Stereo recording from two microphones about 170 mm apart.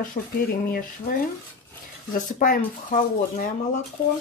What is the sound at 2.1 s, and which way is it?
Speech, 50° left (ahead or behind).